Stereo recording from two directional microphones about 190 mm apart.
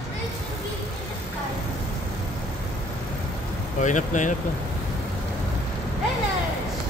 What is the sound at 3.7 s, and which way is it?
Speech, 40° left (ahead or behind).